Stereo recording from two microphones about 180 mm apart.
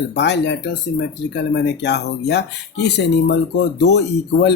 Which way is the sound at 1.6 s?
70° left (ahead or behind).